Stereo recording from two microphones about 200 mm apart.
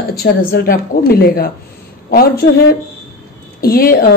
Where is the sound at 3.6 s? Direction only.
50° left (ahead or behind).